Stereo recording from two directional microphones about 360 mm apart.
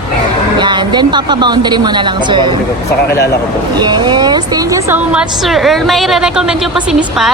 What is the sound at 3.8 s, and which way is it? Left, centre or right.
Speech, centre.